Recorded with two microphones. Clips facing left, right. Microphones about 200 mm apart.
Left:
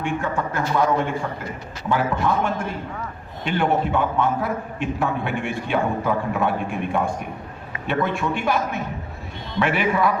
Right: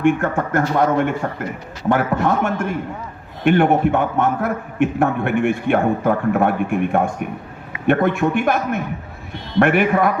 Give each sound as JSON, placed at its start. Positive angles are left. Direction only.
{"t": 0.0, "sound": "a man's voice", "side_deg": -55}